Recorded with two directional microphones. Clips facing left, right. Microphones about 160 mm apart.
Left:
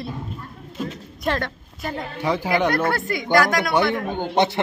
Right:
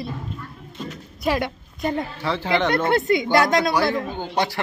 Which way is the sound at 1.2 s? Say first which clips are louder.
Right 2 dB; 10° right (ahead or behind).